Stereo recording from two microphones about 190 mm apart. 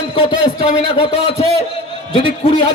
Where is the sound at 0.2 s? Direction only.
25° left (ahead or behind).